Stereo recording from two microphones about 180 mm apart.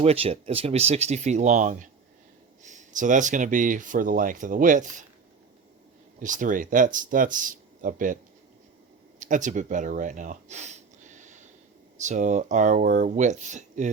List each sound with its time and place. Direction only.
0.0 s speech: 35° right (ahead or behind)
6.1 s speech: 45° right (ahead or behind)